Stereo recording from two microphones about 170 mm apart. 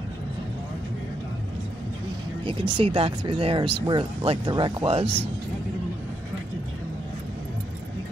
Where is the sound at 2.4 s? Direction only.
30° right (ahead or behind).